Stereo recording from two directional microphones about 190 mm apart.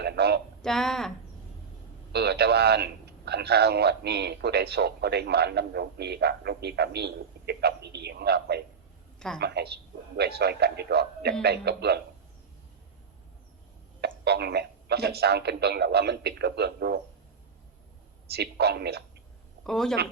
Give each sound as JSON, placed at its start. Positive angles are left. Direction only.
{"t": 0.0, "sound": "a sound", "side_deg": -60}
{"t": 0.6, "sound": "a woman's voice", "side_deg": 0}
{"t": 2.1, "sound": "a man's voice", "side_deg": -60}
{"t": 9.1, "sound": "a sound", "side_deg": 5}
{"t": 9.4, "sound": "a man's voice", "side_deg": -60}
{"t": 14.3, "sound": "a man's voice", "side_deg": -60}
{"t": 18.3, "sound": "a man's voice", "side_deg": -60}
{"t": 19.6, "sound": "a woman's voice", "side_deg": 5}